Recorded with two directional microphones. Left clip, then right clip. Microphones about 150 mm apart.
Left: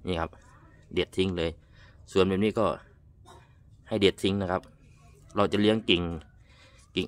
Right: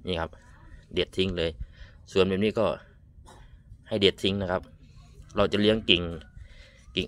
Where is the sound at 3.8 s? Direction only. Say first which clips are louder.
Right 1 dB; 20° left (ahead or behind).